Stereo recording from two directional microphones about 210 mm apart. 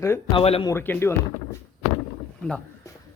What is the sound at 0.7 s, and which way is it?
Speech, 10° left (ahead or behind).